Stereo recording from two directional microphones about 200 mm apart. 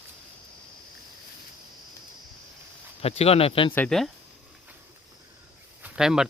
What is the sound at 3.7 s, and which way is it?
Speech, 5° left (ahead or behind).